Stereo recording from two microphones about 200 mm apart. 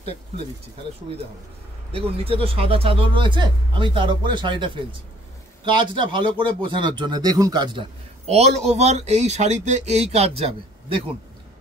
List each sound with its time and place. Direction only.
1.9 s speech: 30° right (ahead or behind)
8.3 s speech: 30° right (ahead or behind)